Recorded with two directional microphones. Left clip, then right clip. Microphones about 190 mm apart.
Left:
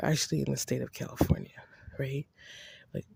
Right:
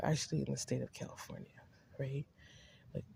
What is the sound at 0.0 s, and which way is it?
Speech, 50° left (ahead or behind).